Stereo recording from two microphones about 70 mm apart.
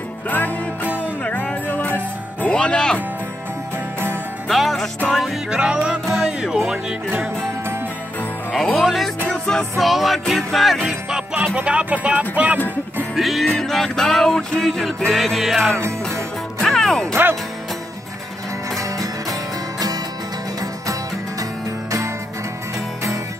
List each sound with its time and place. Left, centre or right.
1.2 s music: centre
4.5 s music: centre
5.6 s music: centre
8.7 s music: centre
9.3 s music: centre
9.8 s music: centre; by 12.5 s right
13.1 s music: centre
17.1 s speech: right
18.8 s music: right